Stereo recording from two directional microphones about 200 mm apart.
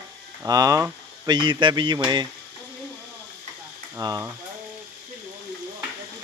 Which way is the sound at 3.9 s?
15° right (ahead or behind).